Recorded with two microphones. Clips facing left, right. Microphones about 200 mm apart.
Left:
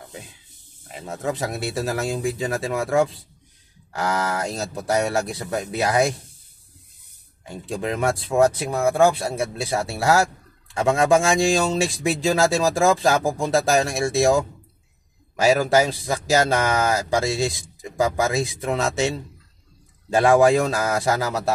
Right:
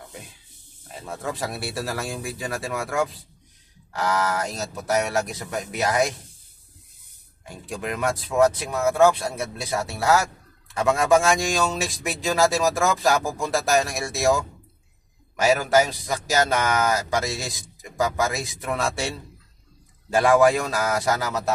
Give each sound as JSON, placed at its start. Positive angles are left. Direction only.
{"t": 1.0, "sound": "speech", "side_deg": 20}
{"t": 4.6, "sound": "speech", "side_deg": 30}
{"t": 7.4, "sound": "speech", "side_deg": 25}
{"t": 15.4, "sound": "speech", "side_deg": 30}
{"t": 20.2, "sound": "speech", "side_deg": 30}